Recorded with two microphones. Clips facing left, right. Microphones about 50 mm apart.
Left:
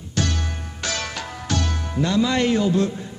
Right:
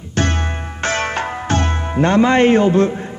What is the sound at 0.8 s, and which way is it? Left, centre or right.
Speech, right.